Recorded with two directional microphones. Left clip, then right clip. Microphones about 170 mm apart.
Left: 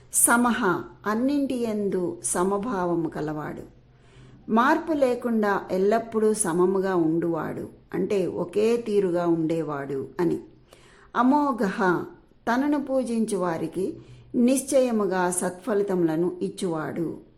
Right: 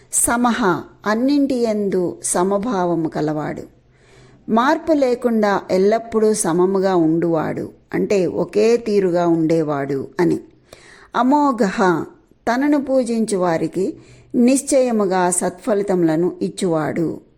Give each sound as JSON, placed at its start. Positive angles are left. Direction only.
{"t": 0.3, "sound": "a woman's voice", "side_deg": -30}